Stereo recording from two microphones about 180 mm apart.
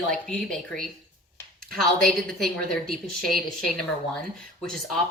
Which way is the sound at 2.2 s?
Centre (ahead or behind).